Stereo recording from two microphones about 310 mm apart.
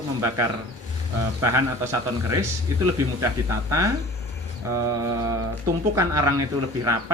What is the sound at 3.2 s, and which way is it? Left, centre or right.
Speech, centre.